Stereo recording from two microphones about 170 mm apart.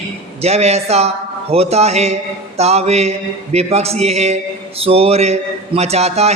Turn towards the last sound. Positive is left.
turn(degrees=-40)  # may be behind; listen again after turning